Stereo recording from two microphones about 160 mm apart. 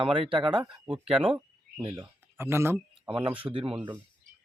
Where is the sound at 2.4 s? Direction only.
15° right (ahead or behind).